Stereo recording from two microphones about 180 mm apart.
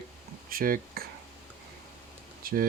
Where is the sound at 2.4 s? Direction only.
55° right (ahead or behind).